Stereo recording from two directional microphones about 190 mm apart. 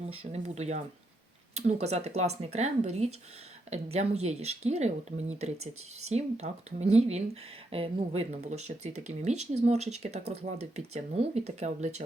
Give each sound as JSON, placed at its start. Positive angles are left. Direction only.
{"t": 0.1, "sound": "speech", "side_deg": -30}